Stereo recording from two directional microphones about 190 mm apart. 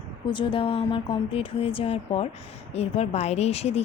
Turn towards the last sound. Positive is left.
turn(degrees=35)  # may be behind; listen again after turning